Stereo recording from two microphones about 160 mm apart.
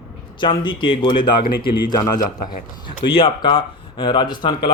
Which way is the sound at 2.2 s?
55° left (ahead or behind).